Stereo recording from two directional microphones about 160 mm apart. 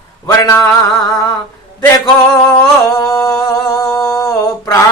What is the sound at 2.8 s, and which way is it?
Humming, 25° left (ahead or behind).